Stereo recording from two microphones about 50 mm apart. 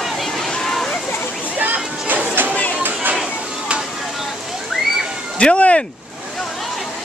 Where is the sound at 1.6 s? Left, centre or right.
Right.